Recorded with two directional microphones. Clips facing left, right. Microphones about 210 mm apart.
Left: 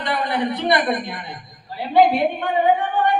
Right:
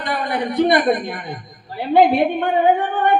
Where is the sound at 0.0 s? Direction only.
50° right (ahead or behind).